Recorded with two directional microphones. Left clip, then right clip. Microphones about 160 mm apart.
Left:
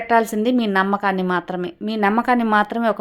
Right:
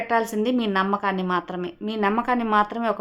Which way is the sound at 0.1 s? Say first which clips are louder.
Left 6 dB; 30° left (ahead or behind).